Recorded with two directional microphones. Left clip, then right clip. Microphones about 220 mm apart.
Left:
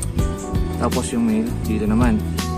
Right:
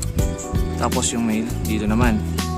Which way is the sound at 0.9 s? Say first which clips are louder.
Left 1 dB; 50° right (ahead or behind).